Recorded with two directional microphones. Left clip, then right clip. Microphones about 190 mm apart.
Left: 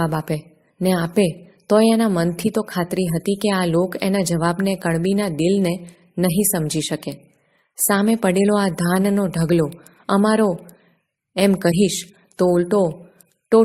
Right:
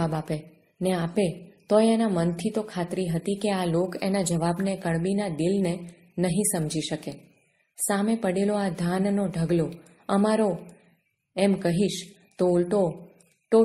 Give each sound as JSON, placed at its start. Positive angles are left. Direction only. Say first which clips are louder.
{"t": 0.0, "sound": "a woman's voice", "louder": "left 6 dB", "side_deg": 30}